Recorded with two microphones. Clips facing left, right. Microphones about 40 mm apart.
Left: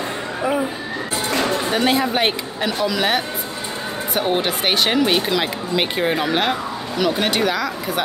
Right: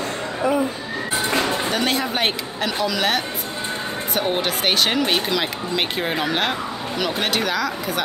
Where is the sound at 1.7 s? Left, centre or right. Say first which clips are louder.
Left 4 dB; centre.